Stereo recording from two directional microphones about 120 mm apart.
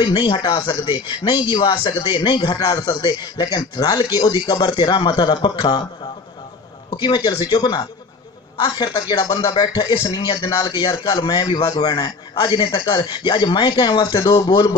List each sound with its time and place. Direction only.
0.0 s a man's voice: 40° left (ahead or behind)
6.9 s a man's voice: 35° left (ahead or behind)